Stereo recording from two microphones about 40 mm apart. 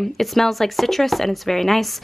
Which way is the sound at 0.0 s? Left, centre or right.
Centre.